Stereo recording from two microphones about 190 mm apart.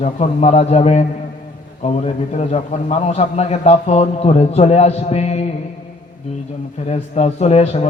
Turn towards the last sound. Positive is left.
turn(degrees=35)  # may be behind; listen again after turning